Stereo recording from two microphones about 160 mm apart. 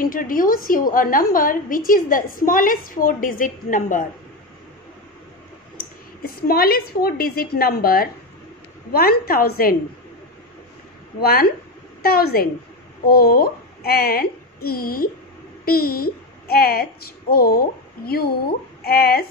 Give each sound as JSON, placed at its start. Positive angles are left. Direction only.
{"t": 0.0, "sound": "a woman's voice", "side_deg": 60}
{"t": 5.8, "sound": "a woman's voice", "side_deg": 65}
{"t": 11.1, "sound": "a woman's voice", "side_deg": 70}